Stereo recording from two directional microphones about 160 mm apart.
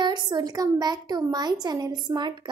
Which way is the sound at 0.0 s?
25° right (ahead or behind).